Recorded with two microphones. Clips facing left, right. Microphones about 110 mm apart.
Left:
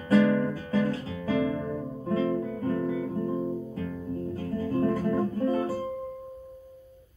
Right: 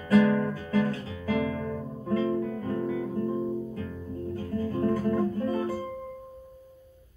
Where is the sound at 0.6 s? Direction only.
30° left (ahead or behind).